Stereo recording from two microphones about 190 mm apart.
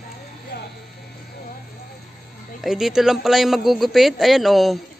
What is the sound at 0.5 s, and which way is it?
Speech, 55° left (ahead or behind).